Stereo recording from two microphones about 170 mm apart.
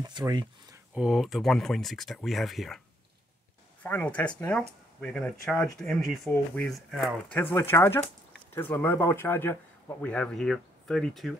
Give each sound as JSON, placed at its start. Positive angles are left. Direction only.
{"t": 0.0, "sound": "speech", "side_deg": -25}
{"t": 0.9, "sound": "speech", "side_deg": -5}
{"t": 4.1, "sound": "speech", "side_deg": 5}
{"t": 7.5, "sound": "speech", "side_deg": 15}